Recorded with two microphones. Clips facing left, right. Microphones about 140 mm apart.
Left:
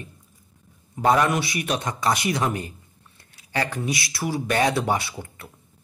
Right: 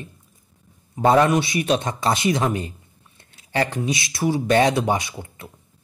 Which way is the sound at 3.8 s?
20° right (ahead or behind).